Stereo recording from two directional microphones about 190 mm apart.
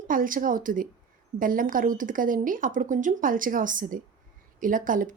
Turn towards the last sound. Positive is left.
turn(degrees=-45)  # may be behind; listen again after turning